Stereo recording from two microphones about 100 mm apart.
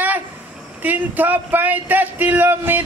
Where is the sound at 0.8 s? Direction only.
15° right (ahead or behind).